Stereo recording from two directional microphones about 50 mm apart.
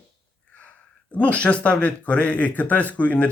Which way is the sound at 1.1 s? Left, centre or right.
Left.